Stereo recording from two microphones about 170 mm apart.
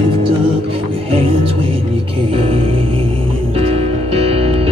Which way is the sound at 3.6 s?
35° right (ahead or behind).